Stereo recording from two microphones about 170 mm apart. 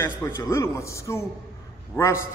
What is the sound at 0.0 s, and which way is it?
A man's voice, 15° left (ahead or behind).